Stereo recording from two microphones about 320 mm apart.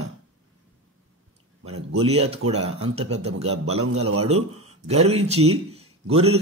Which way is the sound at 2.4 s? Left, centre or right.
Right.